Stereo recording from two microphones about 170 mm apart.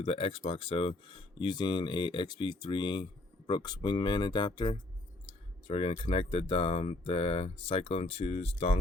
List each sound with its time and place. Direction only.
0.0 s speech: 35° left (ahead or behind)